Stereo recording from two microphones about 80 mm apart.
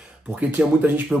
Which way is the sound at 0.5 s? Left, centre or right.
Right.